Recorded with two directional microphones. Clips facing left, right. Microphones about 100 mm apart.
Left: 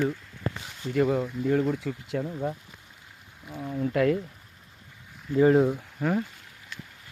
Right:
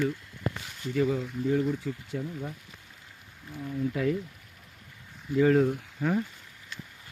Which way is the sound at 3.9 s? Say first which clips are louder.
Left 6 dB; 70° left (ahead or behind).